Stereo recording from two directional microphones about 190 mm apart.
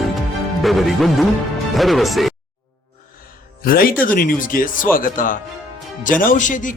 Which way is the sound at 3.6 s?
50° left (ahead or behind).